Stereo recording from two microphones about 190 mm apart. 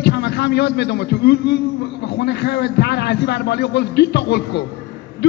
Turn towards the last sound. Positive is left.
turn(degrees=60)  # may be behind; listen again after turning